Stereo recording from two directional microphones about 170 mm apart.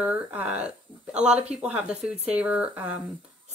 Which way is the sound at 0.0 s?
10° right (ahead or behind).